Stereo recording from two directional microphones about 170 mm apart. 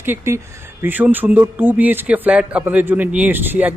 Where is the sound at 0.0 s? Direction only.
10° right (ahead or behind).